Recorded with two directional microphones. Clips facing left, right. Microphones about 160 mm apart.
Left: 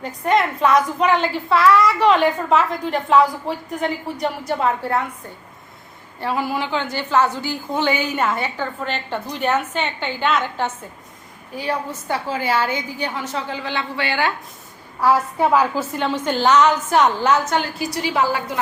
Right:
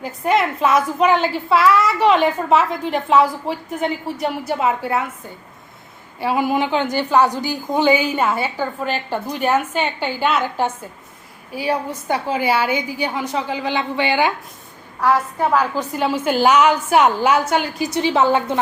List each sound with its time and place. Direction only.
0.0 s a woman's voice: 5° right (ahead or behind)
6.1 s a woman's voice: 15° right (ahead or behind)
15.0 s a woman's voice: 10° left (ahead or behind)
15.9 s a woman's voice: 5° right (ahead or behind); by 18.6 s 25° right (ahead or behind)